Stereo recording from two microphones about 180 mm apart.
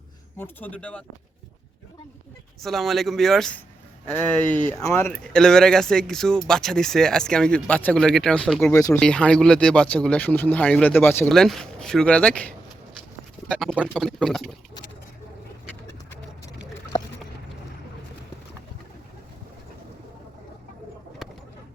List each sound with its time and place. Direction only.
0.3 s speech: 10° left (ahead or behind)
2.6 s speech: centre (ahead or behind)
8.7 s speech: 20° left (ahead or behind)
9.0 s speech: 5° left (ahead or behind)